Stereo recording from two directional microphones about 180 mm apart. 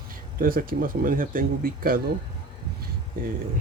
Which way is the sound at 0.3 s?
55° right (ahead or behind).